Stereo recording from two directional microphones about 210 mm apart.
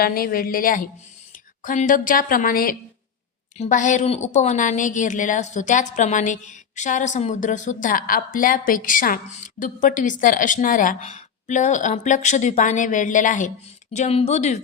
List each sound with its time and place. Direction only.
0.0 s a woman's voice: 45° left (ahead or behind)